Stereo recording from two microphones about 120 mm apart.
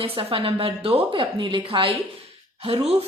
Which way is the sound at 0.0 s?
50° right (ahead or behind).